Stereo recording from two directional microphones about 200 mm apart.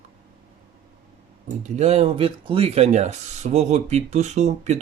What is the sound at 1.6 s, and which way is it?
Speech, 35° right (ahead or behind).